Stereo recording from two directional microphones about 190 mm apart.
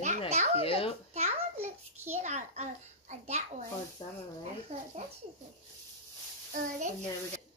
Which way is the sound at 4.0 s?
25° left (ahead or behind).